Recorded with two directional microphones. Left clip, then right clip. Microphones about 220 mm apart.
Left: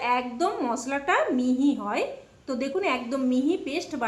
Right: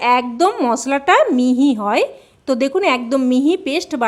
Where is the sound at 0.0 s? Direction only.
50° right (ahead or behind).